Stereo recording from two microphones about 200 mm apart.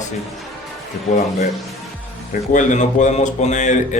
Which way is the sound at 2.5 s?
40° left (ahead or behind).